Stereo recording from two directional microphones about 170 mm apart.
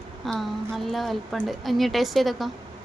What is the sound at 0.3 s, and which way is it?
A woman's voice, centre (ahead or behind).